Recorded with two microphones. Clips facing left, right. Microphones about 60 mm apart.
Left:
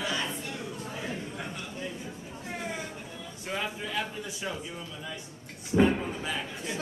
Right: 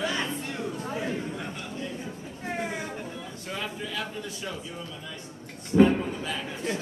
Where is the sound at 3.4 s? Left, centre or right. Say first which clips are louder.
Left 1 dB; centre.